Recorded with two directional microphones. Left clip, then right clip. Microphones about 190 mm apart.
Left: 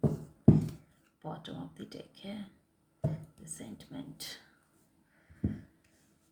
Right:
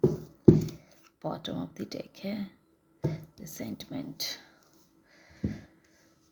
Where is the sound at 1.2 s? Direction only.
45° right (ahead or behind).